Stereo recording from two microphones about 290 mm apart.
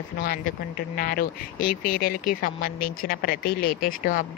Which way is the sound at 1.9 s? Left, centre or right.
Left.